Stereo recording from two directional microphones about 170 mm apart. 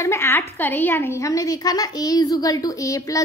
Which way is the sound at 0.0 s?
15° left (ahead or behind).